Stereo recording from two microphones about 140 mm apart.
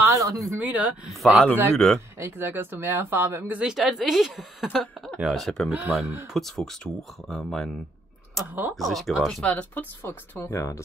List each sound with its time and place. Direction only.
0.0 s a sound: 20° right (ahead or behind)
0.6 s speech: 10° right (ahead or behind); by 2.0 s 5° left (ahead or behind)
2.0 s speech: 15° right (ahead or behind); by 5.7 s centre (ahead or behind)
5.7 s speech: 10° right (ahead or behind)
8.7 s speech: centre (ahead or behind); by 10.8 s 20° left (ahead or behind)